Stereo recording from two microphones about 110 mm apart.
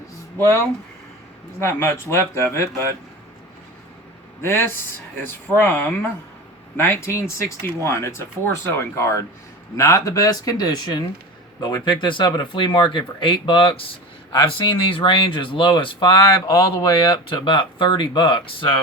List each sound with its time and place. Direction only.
1.5 s speech: 25° left (ahead or behind)
4.4 s speech: 20° left (ahead or behind); by 16.2 s 50° left (ahead or behind)
16.5 s speech: 35° left (ahead or behind); by 18.8 s 50° left (ahead or behind)